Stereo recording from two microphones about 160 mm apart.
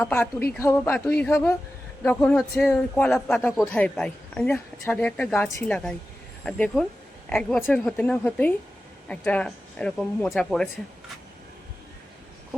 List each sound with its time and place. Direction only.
0.0 s speech: 15° left (ahead or behind)